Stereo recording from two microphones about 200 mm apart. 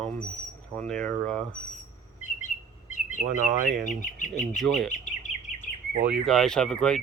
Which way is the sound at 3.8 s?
40° left (ahead or behind).